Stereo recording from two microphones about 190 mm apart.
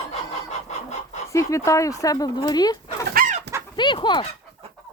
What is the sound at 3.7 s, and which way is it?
Dog, 25° left (ahead or behind).